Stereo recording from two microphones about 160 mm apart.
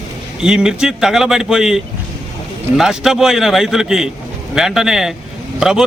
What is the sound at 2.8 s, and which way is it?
A man's voice, centre (ahead or behind).